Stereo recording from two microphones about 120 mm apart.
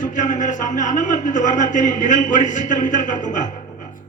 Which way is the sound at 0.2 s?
90° left.